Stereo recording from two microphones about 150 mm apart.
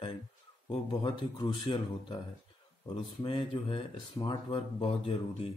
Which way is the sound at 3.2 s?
35° left (ahead or behind).